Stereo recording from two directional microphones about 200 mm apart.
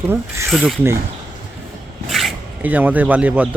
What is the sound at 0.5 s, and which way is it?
Speech, centre (ahead or behind).